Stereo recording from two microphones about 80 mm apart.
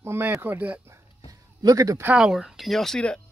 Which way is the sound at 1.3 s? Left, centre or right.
Right.